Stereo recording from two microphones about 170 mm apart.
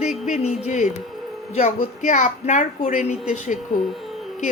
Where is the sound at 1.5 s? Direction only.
45° left (ahead or behind).